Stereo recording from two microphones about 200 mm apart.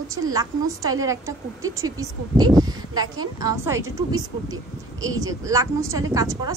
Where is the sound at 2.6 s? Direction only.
20° right (ahead or behind).